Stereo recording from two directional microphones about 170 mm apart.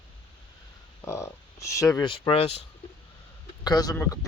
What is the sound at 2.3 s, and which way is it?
Speech, 35° left (ahead or behind).